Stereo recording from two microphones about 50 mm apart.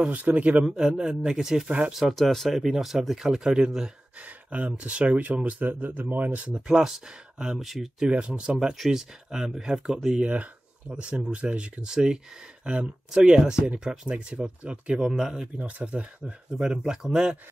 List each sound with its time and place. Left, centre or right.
0.1 s speech: right
0.7 s speech: centre
4.2 s speech: right
6.7 s speech: centre
8.1 s speech: right
10.2 s speech: right
15.0 s speech: centre
15.6 s speech: right